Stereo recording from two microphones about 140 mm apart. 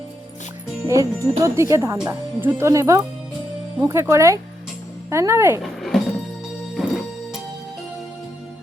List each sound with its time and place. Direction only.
0.9 s speech: 20° right (ahead or behind)
5.9 s music: 5° left (ahead or behind)